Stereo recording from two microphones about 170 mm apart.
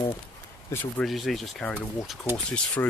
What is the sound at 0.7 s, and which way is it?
Speech, 15° left (ahead or behind).